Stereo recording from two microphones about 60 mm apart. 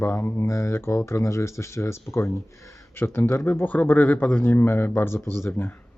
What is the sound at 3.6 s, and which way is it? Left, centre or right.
Speech, left.